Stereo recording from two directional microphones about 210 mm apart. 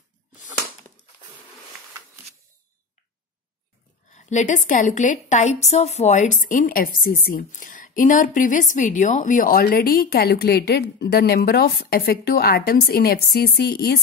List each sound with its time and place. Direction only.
4.1 s a woman's voice: 35° left (ahead or behind)